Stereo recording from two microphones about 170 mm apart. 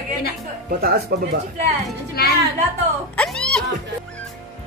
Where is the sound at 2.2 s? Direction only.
65° left (ahead or behind).